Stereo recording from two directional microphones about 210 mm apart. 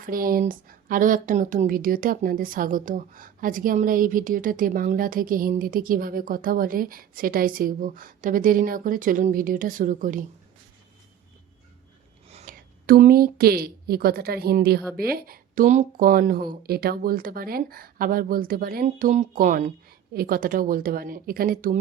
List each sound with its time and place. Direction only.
0.0 s a woman's voice: 40° right (ahead or behind)
12.3 s a sound: 30° right (ahead or behind)
12.8 s speech: 45° right (ahead or behind)